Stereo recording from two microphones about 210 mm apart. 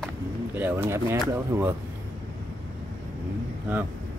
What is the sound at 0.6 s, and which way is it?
Speech, 10° right (ahead or behind).